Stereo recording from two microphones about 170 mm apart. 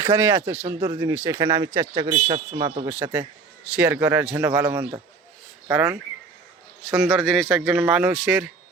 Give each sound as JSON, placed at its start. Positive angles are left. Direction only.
{"t": 0.1, "sound": "a man's voice", "side_deg": -10}
{"t": 2.9, "sound": "speech", "side_deg": -10}
{"t": 6.9, "sound": "speech", "side_deg": 0}